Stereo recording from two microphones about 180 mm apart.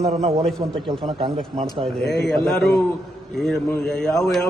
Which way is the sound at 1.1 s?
30° right (ahead or behind).